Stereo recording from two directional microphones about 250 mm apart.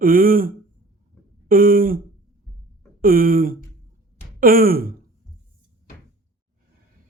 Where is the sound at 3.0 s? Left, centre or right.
Right.